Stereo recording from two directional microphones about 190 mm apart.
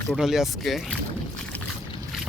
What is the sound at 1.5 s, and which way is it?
Boat, 10° left (ahead or behind).